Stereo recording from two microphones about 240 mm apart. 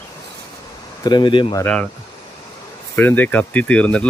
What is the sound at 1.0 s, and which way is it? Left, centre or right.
Speech, centre.